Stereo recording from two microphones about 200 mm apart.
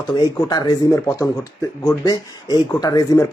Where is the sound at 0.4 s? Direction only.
15° left (ahead or behind).